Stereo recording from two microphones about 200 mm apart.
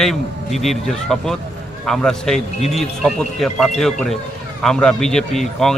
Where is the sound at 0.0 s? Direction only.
Centre (ahead or behind).